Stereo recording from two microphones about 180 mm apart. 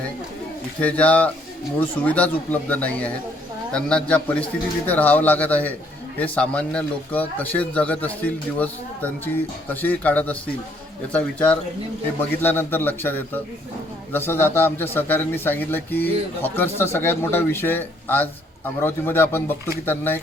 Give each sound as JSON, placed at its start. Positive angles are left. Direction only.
{"t": 0.8, "sound": "a man's voice", "side_deg": 10}